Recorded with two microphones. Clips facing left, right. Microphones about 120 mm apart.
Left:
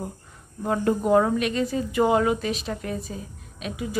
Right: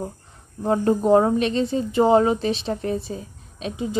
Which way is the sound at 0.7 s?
30° right (ahead or behind).